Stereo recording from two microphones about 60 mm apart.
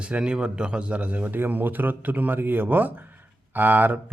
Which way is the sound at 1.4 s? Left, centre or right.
Right.